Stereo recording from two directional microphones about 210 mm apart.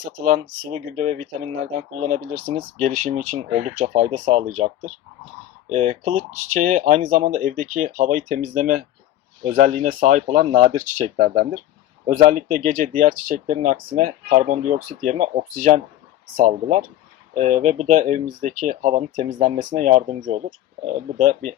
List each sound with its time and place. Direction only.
0.3 s speech: 35° right (ahead or behind)